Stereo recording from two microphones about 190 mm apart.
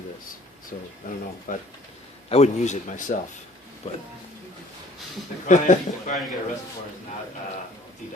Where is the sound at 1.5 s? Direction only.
45° left (ahead or behind).